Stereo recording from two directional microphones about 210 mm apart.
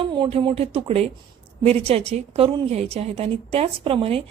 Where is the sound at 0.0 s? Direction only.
25° right (ahead or behind).